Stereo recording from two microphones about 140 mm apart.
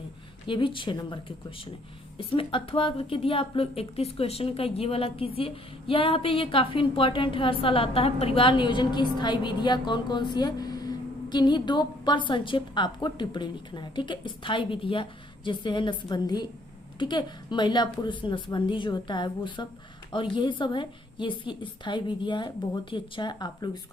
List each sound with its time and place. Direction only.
0.4 s a woman's voice: 35° left (ahead or behind)